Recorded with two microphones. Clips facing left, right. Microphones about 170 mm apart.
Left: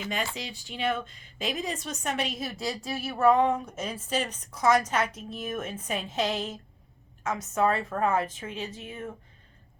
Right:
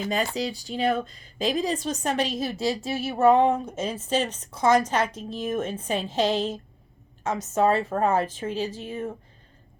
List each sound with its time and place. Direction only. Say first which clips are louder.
0.0 s speech: right 7 dB; 35° right (ahead or behind)